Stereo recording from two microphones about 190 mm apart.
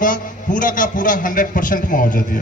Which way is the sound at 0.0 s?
45° left (ahead or behind).